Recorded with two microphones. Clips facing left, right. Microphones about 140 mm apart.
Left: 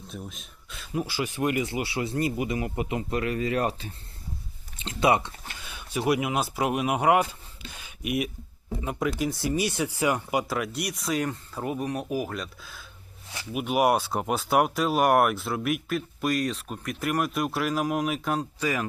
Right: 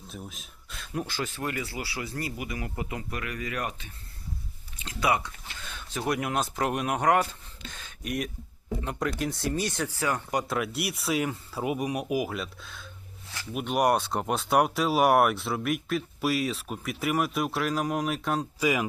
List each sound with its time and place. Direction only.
0.1 s speech: centre (ahead or behind); by 3.9 s 35° left (ahead or behind)
4.8 s a sound: 25° left (ahead or behind)
5.5 s speech: 10° left (ahead or behind)
18.6 s speech: 10° right (ahead or behind)